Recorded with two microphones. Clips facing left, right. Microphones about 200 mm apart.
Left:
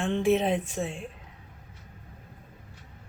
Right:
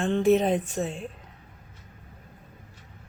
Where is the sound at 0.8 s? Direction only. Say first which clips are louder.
Right 2 dB; 40° right (ahead or behind).